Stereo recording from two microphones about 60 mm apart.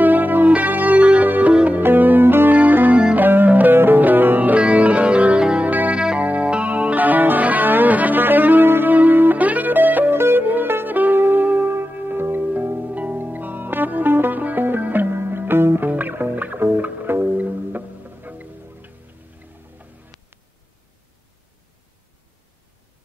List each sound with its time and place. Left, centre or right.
0.0 s music: right
1.8 s music: right; by 5.7 s centre
5.7 s music: right
5.9 s music: centre